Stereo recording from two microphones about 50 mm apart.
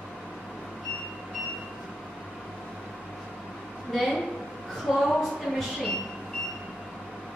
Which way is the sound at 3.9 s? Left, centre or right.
Centre.